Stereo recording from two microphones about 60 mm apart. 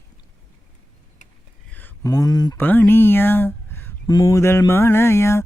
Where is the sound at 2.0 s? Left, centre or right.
Left.